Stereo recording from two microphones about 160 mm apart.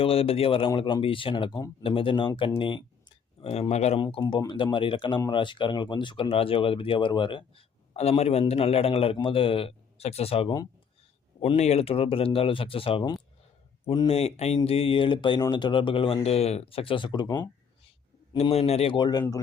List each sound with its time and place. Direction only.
0.0 s speech: 35° left (ahead or behind)
4.3 s speech: 30° left (ahead or behind)
18.3 s speech: 40° left (ahead or behind)